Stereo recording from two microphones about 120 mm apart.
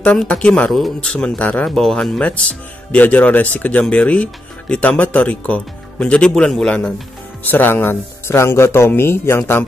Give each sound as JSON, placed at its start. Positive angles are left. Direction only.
{"t": 0.0, "sound": "speech", "side_deg": 10}